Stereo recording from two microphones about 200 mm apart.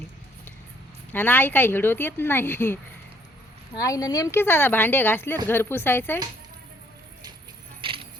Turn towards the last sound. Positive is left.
turn(degrees=-25)  # may be behind; listen again after turning